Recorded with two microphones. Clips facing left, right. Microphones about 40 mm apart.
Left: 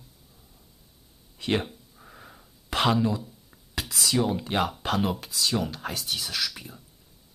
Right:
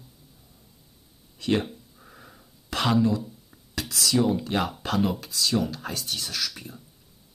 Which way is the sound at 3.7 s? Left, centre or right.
Centre.